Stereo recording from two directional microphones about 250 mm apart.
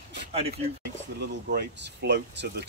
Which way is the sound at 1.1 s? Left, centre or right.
Right.